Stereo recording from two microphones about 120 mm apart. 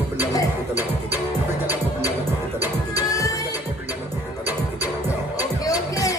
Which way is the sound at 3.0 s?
30° left (ahead or behind).